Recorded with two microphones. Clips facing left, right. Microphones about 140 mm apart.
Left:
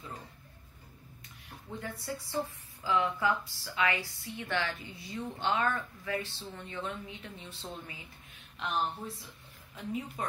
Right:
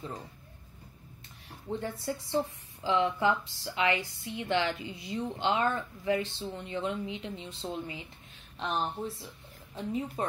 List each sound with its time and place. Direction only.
1.8 s speech: 30° right (ahead or behind)